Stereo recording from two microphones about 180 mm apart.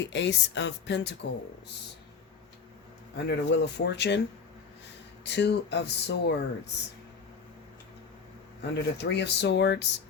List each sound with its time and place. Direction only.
0.0 s speech: 80° left
3.2 s speech: 70° left (ahead or behind)
5.2 s speech: 75° left (ahead or behind)
8.7 s speech: 70° left (ahead or behind)